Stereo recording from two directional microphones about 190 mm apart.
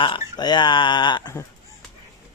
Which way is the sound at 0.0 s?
25° left (ahead or behind).